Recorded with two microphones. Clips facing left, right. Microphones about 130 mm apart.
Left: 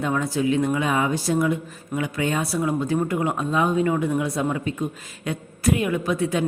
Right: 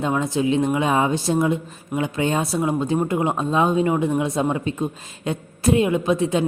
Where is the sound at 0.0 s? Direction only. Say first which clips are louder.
Right 2 dB; 20° right (ahead or behind).